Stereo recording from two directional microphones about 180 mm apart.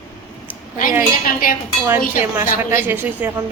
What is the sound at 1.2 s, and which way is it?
Speech, 50° left (ahead or behind).